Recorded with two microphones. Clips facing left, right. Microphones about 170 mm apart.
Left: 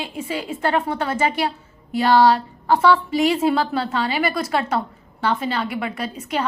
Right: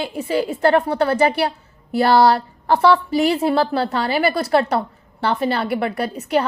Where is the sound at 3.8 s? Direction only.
60° right (ahead or behind).